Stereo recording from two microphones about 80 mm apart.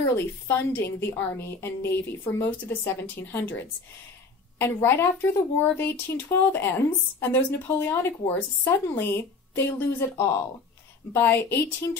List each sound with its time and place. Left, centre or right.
0.0 s a woman's voice: left